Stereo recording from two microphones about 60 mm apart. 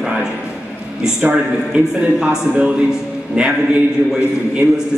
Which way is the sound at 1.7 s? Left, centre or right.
Centre.